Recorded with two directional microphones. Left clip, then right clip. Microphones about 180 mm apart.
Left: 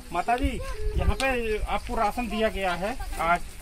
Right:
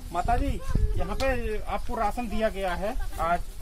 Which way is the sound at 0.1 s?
5° right (ahead or behind).